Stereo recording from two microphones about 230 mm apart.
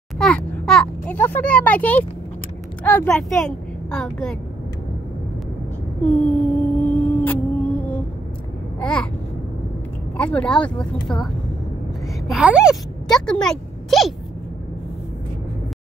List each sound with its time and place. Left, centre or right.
0.2 s a child's voice: centre
6.0 s a sound: centre
10.1 s speech: centre
12.3 s a woman's voice: centre